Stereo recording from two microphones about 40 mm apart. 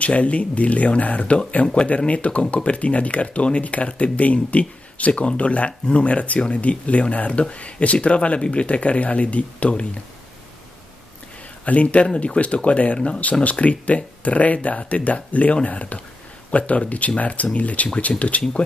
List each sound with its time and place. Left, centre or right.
0.0 s speech: left
11.6 s speech: left